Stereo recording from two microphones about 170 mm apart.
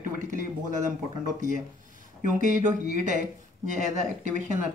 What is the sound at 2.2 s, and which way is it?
Speech, 45° right (ahead or behind).